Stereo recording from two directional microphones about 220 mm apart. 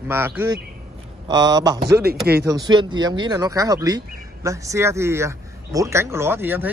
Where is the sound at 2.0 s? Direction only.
45° right (ahead or behind).